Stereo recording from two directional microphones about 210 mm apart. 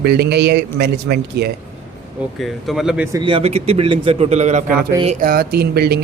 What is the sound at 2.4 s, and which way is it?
Speech, centre (ahead or behind).